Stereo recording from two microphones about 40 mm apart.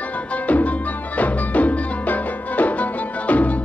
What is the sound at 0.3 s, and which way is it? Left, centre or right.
Music, left.